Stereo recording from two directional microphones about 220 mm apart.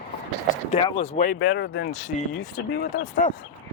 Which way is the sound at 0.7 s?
25° left (ahead or behind).